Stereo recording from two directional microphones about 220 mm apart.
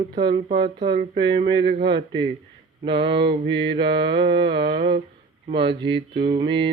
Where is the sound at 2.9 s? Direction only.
20° right (ahead or behind).